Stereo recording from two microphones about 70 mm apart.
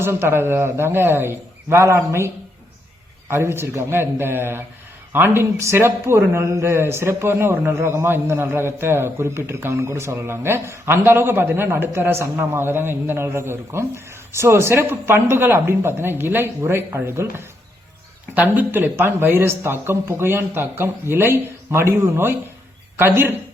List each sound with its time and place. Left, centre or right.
0.0 s speech: right
3.2 s speech: right
18.3 s speech: right